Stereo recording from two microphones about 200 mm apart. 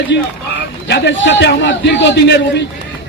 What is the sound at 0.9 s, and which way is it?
A man's voice, 60° left (ahead or behind).